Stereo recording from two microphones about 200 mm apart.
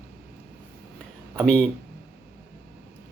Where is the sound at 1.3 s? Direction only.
5° right (ahead or behind).